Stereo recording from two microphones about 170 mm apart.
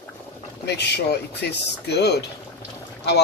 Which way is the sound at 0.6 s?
75° left (ahead or behind).